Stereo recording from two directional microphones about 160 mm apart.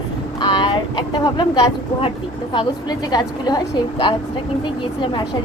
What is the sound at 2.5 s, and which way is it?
A woman's voice, 25° left (ahead or behind).